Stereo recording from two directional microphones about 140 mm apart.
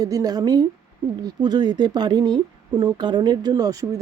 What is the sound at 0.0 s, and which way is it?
Speech, 25° right (ahead or behind).